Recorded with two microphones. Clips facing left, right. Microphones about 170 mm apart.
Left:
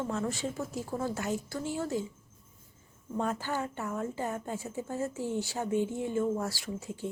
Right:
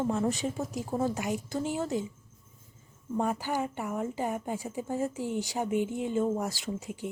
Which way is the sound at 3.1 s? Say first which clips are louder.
Right 2 dB; 10° right (ahead or behind).